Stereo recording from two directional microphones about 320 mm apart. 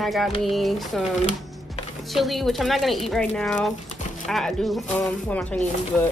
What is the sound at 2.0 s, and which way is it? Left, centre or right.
A woman's voice, centre.